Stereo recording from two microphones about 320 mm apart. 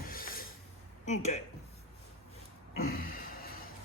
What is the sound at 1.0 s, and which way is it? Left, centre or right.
Speech, left.